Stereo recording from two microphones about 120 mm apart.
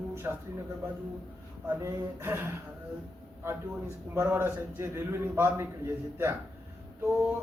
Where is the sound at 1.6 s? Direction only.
25° right (ahead or behind).